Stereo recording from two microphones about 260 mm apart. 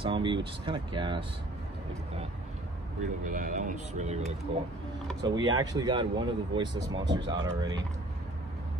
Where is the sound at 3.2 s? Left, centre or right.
Right.